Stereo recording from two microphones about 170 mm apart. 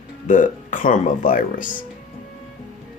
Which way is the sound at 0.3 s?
50° left (ahead or behind).